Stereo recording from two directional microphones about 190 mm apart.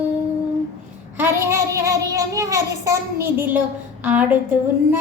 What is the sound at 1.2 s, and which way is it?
A child's voice, 15° right (ahead or behind).